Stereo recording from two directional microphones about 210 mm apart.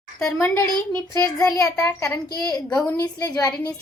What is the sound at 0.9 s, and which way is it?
A woman's voice, 10° left (ahead or behind).